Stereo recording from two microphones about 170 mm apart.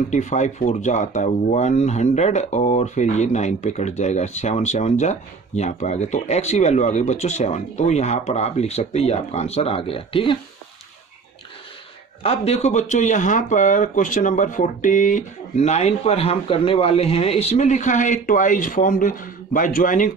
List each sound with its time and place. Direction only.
0.1 s speech: 45° left (ahead or behind)
12.2 s speech: 35° left (ahead or behind)